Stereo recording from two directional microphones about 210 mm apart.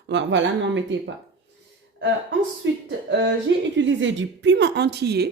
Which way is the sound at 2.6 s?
60° right (ahead or behind).